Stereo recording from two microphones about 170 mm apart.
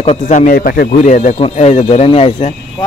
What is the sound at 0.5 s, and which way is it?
Speech, 60° left (ahead or behind).